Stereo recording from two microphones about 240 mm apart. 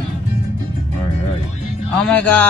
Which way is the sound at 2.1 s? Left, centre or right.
Centre.